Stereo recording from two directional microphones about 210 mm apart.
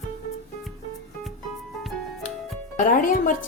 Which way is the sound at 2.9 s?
40° left (ahead or behind).